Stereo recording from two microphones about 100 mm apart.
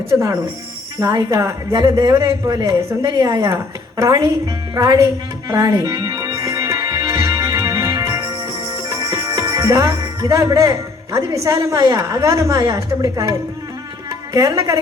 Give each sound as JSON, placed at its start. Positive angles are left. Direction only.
{"t": 0.9, "sound": "a woman's voice", "side_deg": -35}
{"t": 5.5, "sound": "music", "side_deg": -35}
{"t": 14.3, "sound": "a woman's voice", "side_deg": -35}